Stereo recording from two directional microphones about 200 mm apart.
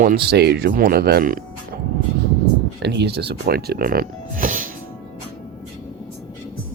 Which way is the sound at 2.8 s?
55° right (ahead or behind).